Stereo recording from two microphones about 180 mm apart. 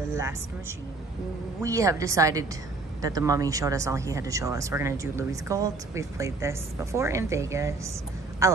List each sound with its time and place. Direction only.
0.1 s speech: 15° right (ahead or behind)